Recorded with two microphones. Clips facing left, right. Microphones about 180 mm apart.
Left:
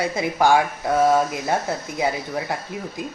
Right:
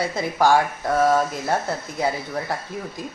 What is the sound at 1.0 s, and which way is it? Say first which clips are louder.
Speech: left 1 dB; 10° left (ahead or behind).